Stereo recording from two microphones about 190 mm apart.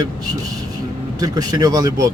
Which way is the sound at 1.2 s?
20° right (ahead or behind).